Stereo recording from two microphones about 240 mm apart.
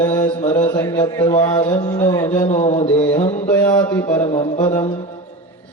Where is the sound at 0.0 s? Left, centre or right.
Centre.